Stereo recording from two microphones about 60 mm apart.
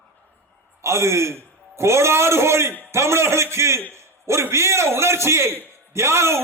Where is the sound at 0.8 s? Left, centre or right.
Right.